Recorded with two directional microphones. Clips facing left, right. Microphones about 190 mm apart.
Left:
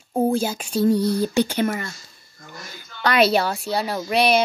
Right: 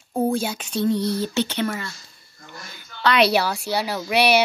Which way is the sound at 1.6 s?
45° left (ahead or behind).